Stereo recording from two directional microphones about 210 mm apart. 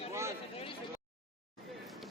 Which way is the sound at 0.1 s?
15° right (ahead or behind).